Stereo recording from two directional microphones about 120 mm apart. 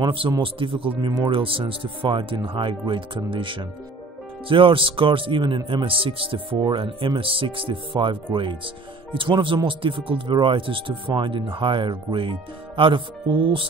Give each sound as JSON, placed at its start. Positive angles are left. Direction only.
{"t": 0.0, "sound": "speech", "side_deg": -45}